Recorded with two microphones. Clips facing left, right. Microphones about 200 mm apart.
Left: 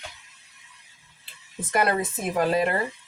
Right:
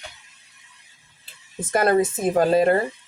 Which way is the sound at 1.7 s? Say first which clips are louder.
Right 5 dB; 40° right (ahead or behind).